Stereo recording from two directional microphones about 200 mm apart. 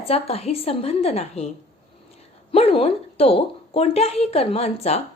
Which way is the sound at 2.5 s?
30° left (ahead or behind).